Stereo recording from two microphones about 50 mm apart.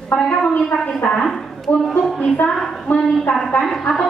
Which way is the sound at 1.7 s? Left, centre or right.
Left.